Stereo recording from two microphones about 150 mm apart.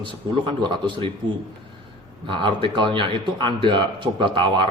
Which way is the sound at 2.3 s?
35° right (ahead or behind).